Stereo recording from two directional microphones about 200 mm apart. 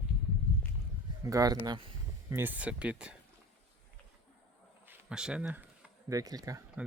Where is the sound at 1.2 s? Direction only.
15° right (ahead or behind).